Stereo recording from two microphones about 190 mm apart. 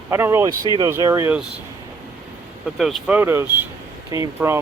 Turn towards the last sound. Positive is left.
turn(degrees=-15)  # may be behind; listen again after turning